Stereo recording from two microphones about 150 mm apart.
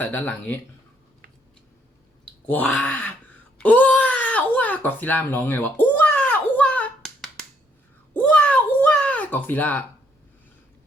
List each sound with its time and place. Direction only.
0.0 s speech: 10° left (ahead or behind)
2.5 s speech: 10° left (ahead or behind)
3.6 s a sound: 10° left (ahead or behind)